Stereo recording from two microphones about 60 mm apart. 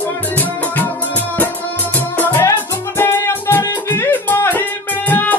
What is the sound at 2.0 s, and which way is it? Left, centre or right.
Music, left.